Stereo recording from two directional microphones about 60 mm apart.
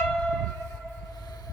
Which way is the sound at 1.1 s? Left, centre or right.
Left.